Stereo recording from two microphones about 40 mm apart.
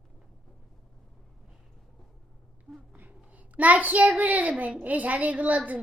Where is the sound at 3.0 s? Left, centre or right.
Right.